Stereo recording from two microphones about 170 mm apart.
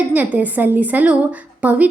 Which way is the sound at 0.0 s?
10° right (ahead or behind).